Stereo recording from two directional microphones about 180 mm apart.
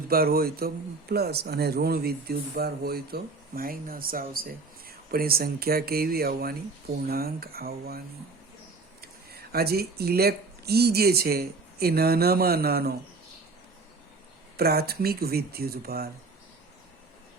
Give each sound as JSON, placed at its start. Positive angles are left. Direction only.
{"t": 0.1, "sound": "speech", "side_deg": -55}
{"t": 14.5, "sound": "speech", "side_deg": -60}